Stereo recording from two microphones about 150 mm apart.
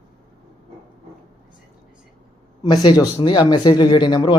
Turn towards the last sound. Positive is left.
turn(degrees=30)  # may be behind; listen again after turning